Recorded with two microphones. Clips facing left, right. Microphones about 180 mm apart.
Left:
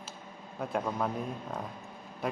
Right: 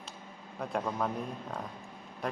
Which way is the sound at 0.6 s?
Centre (ahead or behind).